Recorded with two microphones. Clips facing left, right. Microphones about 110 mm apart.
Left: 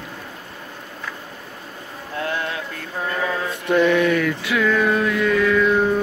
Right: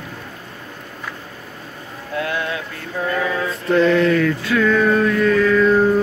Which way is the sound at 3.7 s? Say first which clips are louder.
Right 2 dB; 15° left (ahead or behind).